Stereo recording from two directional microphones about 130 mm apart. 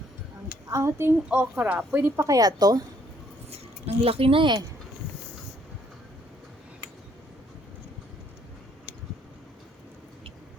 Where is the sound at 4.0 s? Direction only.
45° right (ahead or behind).